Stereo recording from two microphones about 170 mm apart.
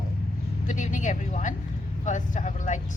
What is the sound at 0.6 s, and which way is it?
Vehicle, 45° left (ahead or behind).